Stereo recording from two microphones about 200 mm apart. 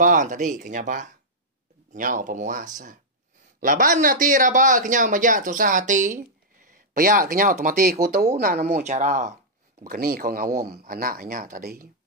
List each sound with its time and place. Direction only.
0.0 s speech: 40° right (ahead or behind)
8.8 s speech: 35° right (ahead or behind)
9.8 s speech: 45° right (ahead or behind)